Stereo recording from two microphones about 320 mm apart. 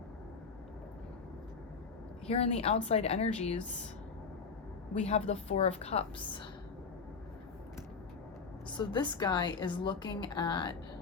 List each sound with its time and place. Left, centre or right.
2.2 s a woman's voice: centre
4.9 s a woman's voice: centre
8.7 s a woman's voice: centre